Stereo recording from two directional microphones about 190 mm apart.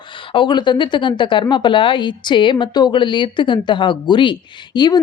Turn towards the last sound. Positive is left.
turn(degrees=20)  # may be behind; listen again after turning